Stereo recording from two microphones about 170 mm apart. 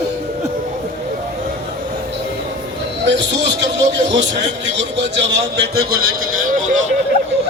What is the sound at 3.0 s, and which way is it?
Speech, 90° right.